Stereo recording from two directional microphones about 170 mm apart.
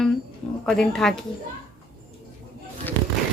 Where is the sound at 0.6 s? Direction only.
5° left (ahead or behind).